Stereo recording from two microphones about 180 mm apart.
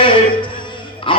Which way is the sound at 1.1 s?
30° left (ahead or behind).